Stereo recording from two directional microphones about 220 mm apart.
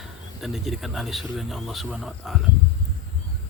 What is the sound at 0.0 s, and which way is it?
Speech, centre (ahead or behind).